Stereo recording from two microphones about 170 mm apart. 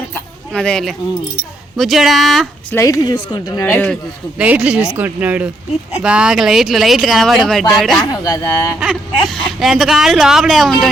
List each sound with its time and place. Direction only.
0.5 s speech: 5° left (ahead or behind)
2.7 s a woman's voice: 20° left (ahead or behind)
4.4 s speech: 10° right (ahead or behind)
8.0 s a woman's voice: 20° left (ahead or behind)
8.8 s speech: centre (ahead or behind)